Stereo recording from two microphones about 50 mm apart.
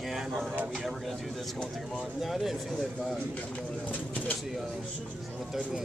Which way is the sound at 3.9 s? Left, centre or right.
Left.